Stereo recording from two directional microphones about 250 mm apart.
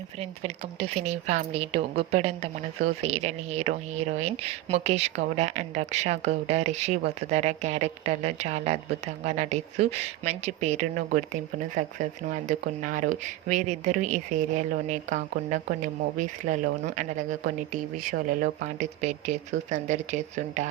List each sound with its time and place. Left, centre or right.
0.2 s speech: right